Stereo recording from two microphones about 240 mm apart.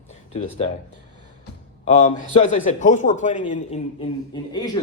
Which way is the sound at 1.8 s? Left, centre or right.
Left.